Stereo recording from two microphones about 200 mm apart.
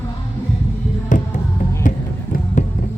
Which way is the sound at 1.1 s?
40° left (ahead or behind).